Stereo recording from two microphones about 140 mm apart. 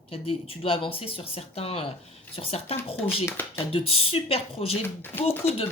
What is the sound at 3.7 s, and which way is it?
Speech, 45° left (ahead or behind).